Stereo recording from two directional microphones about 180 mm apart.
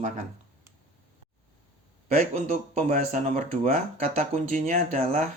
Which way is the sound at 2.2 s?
45° right (ahead or behind).